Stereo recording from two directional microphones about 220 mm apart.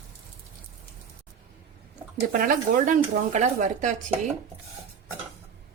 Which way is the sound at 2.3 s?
40° right (ahead or behind).